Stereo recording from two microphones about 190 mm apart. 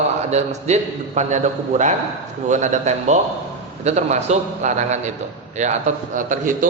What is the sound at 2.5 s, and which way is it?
A man's voice, 40° right (ahead or behind).